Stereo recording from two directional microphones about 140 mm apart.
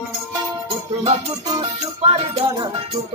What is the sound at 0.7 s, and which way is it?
Music, 35° right (ahead or behind).